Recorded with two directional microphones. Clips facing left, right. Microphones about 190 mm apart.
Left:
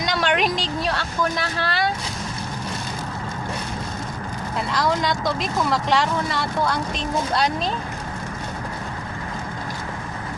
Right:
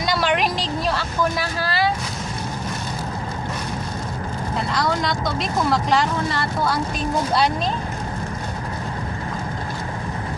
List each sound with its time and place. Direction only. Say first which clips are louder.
0.0 s vehicle: right 1 dB; 5° right (ahead or behind)
4.7 s speech: left 2 dB; centre (ahead or behind)